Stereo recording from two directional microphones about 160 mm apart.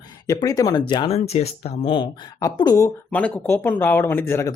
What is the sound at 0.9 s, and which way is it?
Speech, 35° left (ahead or behind).